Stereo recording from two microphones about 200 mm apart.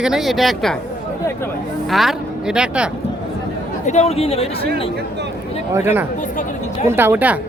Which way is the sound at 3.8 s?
35° left (ahead or behind).